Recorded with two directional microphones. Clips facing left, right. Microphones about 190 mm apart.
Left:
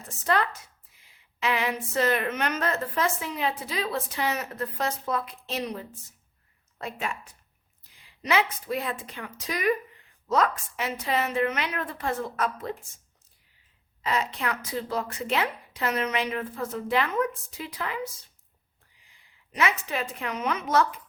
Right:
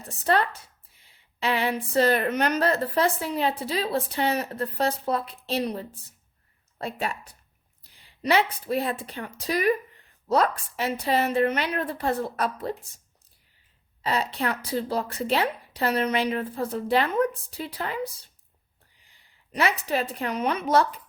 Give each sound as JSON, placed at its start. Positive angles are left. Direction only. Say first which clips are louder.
{"t": 0.0, "sound": "a woman's voice", "louder": "right 2 dB", "side_deg": -35}
{"t": 14.0, "sound": "a woman's voice", "louder": "right 2 dB", "side_deg": -35}
{"t": 19.1, "sound": "a woman's voice", "louder": "right 5 dB", "side_deg": -35}